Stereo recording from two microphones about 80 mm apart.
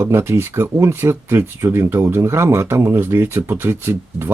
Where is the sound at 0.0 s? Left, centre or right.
Right.